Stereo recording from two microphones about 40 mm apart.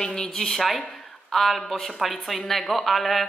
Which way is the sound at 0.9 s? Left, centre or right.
Centre.